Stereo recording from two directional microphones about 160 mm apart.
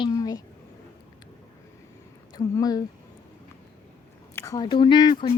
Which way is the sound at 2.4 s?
25° left (ahead or behind).